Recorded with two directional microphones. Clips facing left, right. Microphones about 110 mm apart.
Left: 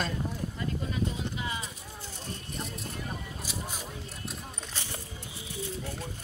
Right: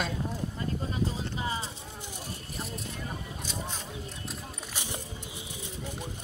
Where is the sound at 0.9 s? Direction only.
35° right (ahead or behind).